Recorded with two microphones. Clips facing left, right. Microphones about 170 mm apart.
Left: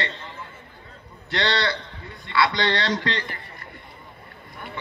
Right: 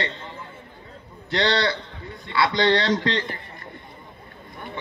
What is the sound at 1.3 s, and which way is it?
A man's voice, 20° right (ahead or behind).